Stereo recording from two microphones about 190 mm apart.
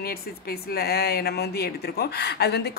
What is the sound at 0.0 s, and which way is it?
Speech, 55° left (ahead or behind).